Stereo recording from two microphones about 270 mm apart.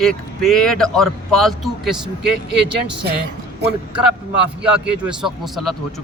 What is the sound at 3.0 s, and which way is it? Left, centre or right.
Speech, right.